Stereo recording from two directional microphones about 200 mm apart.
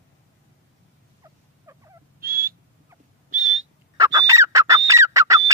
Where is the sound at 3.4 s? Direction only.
85° right.